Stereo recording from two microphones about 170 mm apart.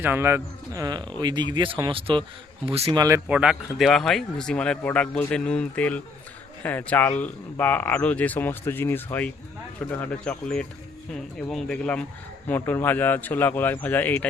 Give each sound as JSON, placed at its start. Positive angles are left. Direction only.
{"t": 0.0, "sound": "speech", "side_deg": -15}
{"t": 3.2, "sound": "speech", "side_deg": -5}